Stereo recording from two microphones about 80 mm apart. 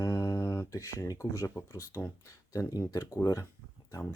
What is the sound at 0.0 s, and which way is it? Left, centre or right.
Speech, left.